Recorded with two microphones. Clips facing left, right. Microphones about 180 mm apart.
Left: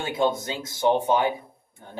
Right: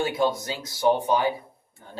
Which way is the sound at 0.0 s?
25° left (ahead or behind).